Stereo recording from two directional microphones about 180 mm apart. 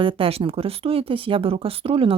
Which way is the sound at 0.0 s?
30° right (ahead or behind).